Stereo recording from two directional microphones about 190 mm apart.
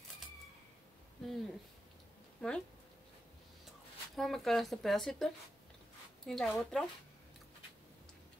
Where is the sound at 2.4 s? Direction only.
5° left (ahead or behind).